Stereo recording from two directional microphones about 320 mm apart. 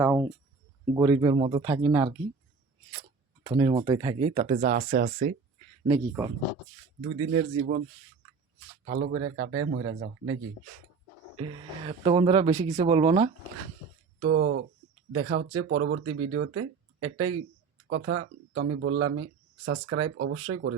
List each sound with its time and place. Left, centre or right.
0.0 s a sound: centre
0.9 s speech: centre
3.4 s speech: centre
5.8 s speech: centre
7.0 s speech: right
8.9 s speech: right
11.5 s speech: centre
14.2 s speech: right
17.8 s speech: right